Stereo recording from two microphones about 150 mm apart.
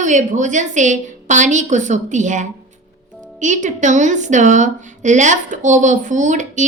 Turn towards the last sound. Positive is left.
turn(degrees=-55)  # may be behind; listen again after turning